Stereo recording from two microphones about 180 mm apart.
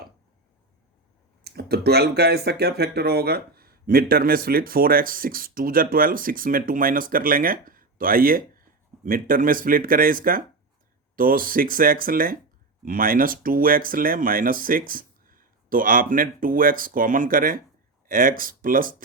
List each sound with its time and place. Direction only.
1.5 s speech: 65° right (ahead or behind)